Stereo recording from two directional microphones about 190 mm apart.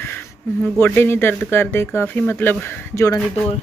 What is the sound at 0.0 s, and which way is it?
Speech, 10° left (ahead or behind).